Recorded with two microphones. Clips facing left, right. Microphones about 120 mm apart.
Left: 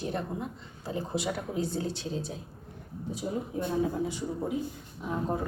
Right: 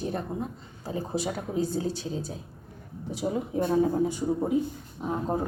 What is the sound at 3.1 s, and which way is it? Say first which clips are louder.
Speech: right 4 dB; 85° right.